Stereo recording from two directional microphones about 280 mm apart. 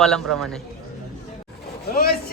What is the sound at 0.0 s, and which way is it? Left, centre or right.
Speech, centre.